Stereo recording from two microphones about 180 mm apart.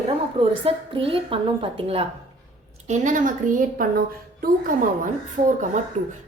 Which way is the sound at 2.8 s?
45° right (ahead or behind).